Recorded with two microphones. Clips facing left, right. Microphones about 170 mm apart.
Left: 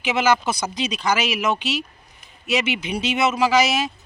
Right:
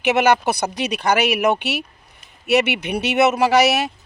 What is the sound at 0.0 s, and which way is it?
Speech, 65° right (ahead or behind).